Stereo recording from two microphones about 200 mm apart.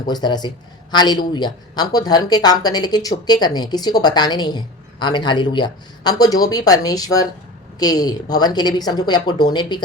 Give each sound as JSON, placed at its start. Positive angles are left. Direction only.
{"t": 0.1, "sound": "speech", "side_deg": 20}